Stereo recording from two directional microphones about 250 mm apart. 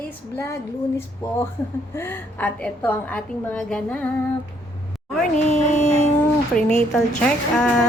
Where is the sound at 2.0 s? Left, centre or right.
Centre.